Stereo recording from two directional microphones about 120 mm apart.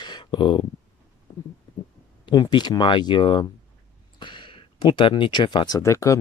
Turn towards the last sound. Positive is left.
turn(degrees=25)  # may be behind; listen again after turning